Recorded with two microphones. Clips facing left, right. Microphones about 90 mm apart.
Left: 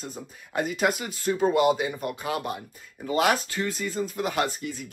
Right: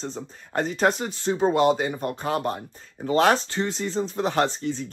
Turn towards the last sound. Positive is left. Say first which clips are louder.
# right 4 dB
turn(degrees=-30)  # may be behind; listen again after turning